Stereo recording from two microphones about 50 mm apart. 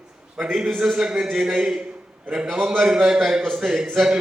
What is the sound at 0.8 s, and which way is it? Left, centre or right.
Speech, centre.